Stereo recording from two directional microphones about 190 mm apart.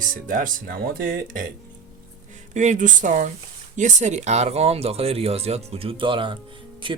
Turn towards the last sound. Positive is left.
turn(degrees=-25)  # may be behind; listen again after turning